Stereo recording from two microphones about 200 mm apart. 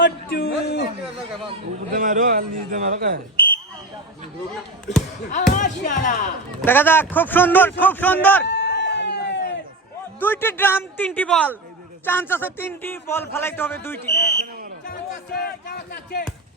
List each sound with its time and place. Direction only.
0.0 s speech: 50° left (ahead or behind)
1.9 s a man's voice: 45° right (ahead or behind)
5.3 s speech: 40° left (ahead or behind)
6.6 s speech: 10° left (ahead or behind)
8.4 s chicken: 60° left (ahead or behind)
10.2 s speech: 10° left (ahead or behind)
14.1 s a man's voice: 55° left (ahead or behind)
15.4 s speech: 50° left (ahead or behind)